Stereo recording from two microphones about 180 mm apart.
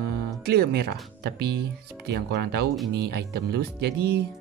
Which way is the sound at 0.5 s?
65° right (ahead or behind).